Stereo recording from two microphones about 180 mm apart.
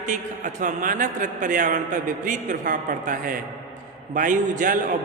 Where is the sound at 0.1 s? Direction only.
45° right (ahead or behind).